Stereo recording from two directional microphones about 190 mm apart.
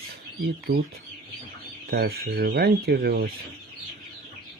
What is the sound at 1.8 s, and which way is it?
Speech, 55° right (ahead or behind).